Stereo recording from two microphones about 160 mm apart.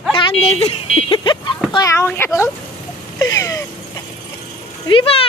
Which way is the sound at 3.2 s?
20° left (ahead or behind).